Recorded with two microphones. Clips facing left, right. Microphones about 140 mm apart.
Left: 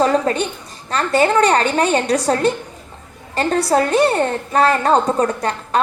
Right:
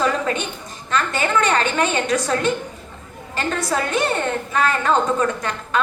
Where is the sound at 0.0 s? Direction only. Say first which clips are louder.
Left 5 dB; 35° left (ahead or behind).